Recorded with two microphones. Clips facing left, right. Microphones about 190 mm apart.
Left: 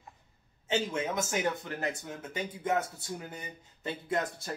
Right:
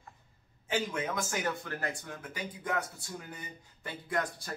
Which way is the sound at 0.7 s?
25° left (ahead or behind).